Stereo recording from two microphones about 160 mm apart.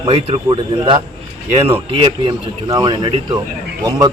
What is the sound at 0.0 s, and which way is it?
Speech, 35° right (ahead or behind).